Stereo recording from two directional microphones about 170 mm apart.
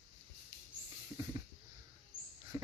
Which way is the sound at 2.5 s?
20° right (ahead or behind).